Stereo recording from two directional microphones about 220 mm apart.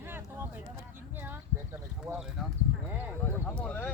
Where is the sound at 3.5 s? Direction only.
5° left (ahead or behind).